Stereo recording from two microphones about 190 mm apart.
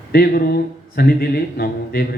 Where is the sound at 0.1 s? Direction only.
55° left (ahead or behind).